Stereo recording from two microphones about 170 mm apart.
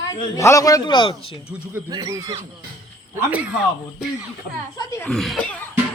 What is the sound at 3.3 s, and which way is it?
Speech, 5° right (ahead or behind).